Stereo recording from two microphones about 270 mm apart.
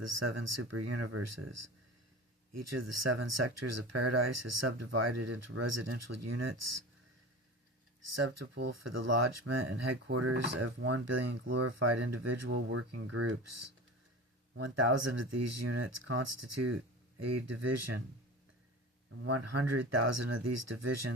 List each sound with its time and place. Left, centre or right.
0.0 s speech: right
8.0 s speech: right
10.1 s speech: right
19.2 s speech: right